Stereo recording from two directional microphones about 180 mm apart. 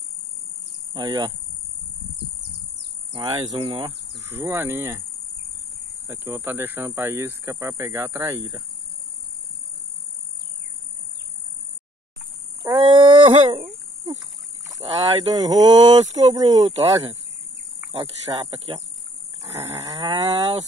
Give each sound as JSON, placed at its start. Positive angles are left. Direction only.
{"t": 0.9, "sound": "speech", "side_deg": -25}
{"t": 3.4, "sound": "speech", "side_deg": -30}
{"t": 4.2, "sound": "speech", "side_deg": -15}
{"t": 6.2, "sound": "speech", "side_deg": -15}
{"t": 12.6, "sound": "a sound", "side_deg": -20}
{"t": 14.9, "sound": "speech", "side_deg": -20}
{"t": 18.3, "sound": "speech", "side_deg": -25}
{"t": 19.5, "sound": "livestock", "side_deg": -20}